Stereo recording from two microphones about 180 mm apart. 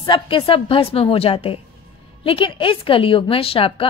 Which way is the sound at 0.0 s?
30° left (ahead or behind).